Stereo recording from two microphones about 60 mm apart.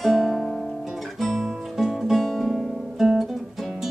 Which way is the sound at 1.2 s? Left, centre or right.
Centre.